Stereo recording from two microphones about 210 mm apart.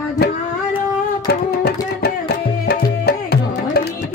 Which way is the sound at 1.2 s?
50° left (ahead or behind).